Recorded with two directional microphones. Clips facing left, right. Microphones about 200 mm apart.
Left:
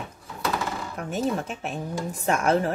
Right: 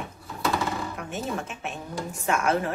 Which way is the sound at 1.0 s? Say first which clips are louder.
Left 5 dB; 35° left (ahead or behind).